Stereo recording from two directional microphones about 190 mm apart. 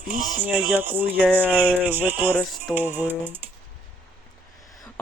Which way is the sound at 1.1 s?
5° left (ahead or behind).